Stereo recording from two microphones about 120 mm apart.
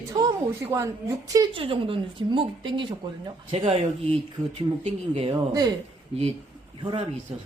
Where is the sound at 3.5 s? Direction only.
55° right (ahead or behind).